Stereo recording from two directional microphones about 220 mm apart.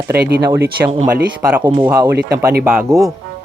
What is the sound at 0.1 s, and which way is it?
Speech, 45° right (ahead or behind).